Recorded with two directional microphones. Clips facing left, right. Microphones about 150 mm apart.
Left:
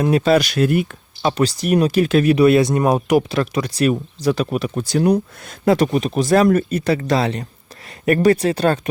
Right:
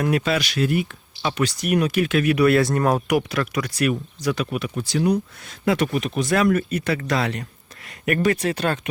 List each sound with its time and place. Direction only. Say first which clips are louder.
0.0 s speech: left 4 dB; 30° left (ahead or behind)
0.3 s speech: left 7 dB; 45° left (ahead or behind)